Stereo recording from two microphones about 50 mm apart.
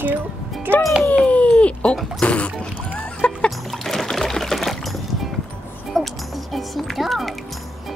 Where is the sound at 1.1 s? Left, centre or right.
Left.